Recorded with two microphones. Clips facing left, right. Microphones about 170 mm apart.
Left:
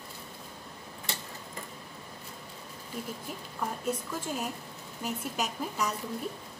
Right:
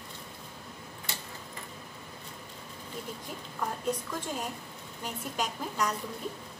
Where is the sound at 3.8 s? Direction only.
5° left (ahead or behind).